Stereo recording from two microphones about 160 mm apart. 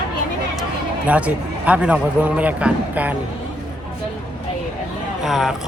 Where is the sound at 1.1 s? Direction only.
10° right (ahead or behind).